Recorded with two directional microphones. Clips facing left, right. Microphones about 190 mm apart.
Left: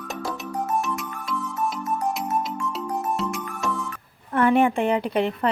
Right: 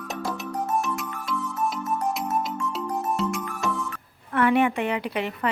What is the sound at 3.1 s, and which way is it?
Music, centre (ahead or behind).